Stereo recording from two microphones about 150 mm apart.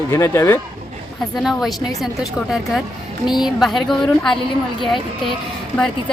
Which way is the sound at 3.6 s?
Centre (ahead or behind).